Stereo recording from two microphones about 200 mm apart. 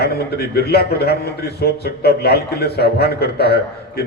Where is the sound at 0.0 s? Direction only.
50° left (ahead or behind).